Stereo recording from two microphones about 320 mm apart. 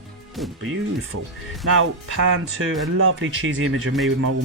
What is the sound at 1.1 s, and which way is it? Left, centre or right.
Speech, right.